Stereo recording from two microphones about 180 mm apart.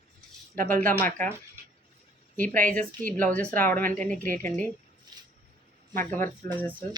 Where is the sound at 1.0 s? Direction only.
10° left (ahead or behind).